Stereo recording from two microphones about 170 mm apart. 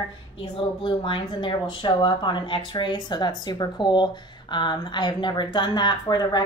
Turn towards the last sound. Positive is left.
turn(degrees=25)  # may be behind; listen again after turning